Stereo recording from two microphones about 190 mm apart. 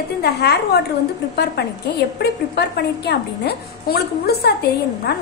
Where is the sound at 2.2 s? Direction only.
60° left (ahead or behind).